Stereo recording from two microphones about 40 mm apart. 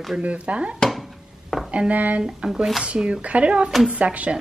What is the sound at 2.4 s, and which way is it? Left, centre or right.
A woman's voice, right.